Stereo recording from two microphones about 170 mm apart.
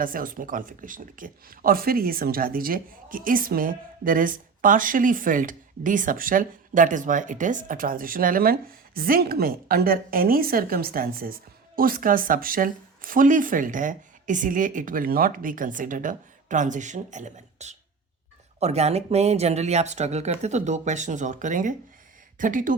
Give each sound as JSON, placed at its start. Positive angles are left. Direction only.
{"t": 0.0, "sound": "a woman's voice", "side_deg": -55}